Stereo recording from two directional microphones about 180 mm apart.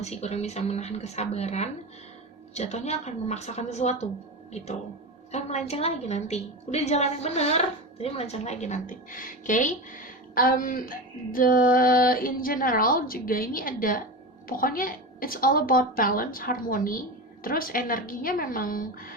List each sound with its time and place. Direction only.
0.0 s a woman's voice: 35° left (ahead or behind); by 19.1 s 55° left (ahead or behind)